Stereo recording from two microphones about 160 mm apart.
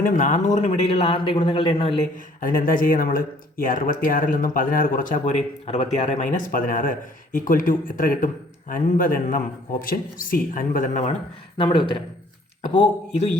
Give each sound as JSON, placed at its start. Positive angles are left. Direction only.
{"t": 0.0, "sound": "a man's voice", "side_deg": 55}
{"t": 2.4, "sound": "speech", "side_deg": 60}
{"t": 5.6, "sound": "speech", "side_deg": 40}
{"t": 11.5, "sound": "a man's voice", "side_deg": 30}